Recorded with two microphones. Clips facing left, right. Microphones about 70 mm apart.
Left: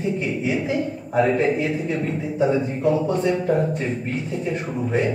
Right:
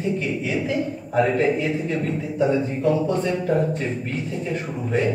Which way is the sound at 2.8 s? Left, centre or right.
Centre.